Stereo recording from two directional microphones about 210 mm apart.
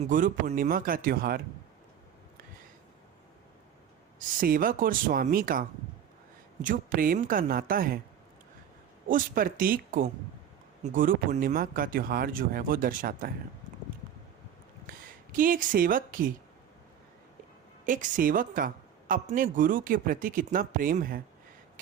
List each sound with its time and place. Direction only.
0.0 s speech: 40° right (ahead or behind)
4.2 s speech: 40° right (ahead or behind)
9.0 s speech: 40° right (ahead or behind)
15.3 s speech: 40° right (ahead or behind)
17.8 s speech: 40° right (ahead or behind)